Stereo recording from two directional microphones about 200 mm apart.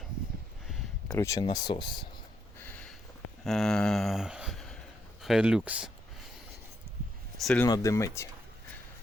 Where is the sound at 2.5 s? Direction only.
10° left (ahead or behind).